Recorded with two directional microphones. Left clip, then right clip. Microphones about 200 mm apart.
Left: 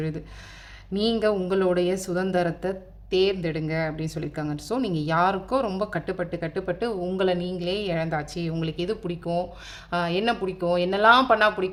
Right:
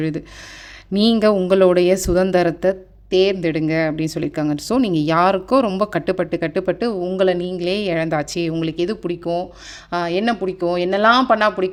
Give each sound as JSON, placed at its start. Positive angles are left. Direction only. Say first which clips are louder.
{"t": 0.9, "sound": "speech", "louder": "right 7 dB", "side_deg": -45}